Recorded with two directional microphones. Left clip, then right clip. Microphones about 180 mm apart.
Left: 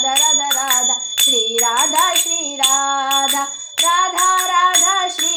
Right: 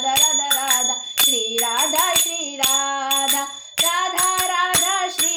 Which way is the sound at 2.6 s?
35° right (ahead or behind).